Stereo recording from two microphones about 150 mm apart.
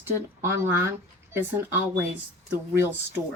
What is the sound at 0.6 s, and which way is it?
Speech, 15° right (ahead or behind).